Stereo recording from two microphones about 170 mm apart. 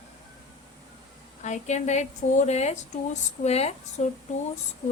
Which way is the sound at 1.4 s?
45° left (ahead or behind).